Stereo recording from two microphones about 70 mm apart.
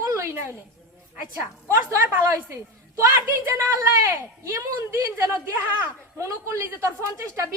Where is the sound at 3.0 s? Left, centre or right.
Right.